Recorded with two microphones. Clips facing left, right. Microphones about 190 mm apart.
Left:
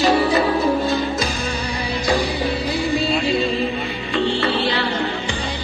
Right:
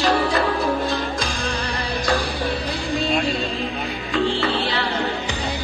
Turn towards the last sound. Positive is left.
turn(degrees=0)  # may be behind; listen again after turning